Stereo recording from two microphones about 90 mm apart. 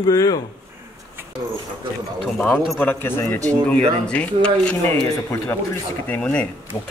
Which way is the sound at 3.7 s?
15° left (ahead or behind).